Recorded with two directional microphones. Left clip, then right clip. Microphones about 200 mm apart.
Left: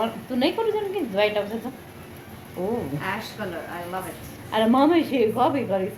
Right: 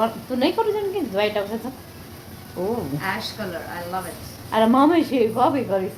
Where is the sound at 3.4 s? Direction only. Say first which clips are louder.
Right 1 dB; 15° left (ahead or behind).